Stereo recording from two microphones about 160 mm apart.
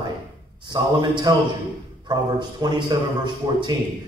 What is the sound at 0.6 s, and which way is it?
A man's voice, 25° right (ahead or behind).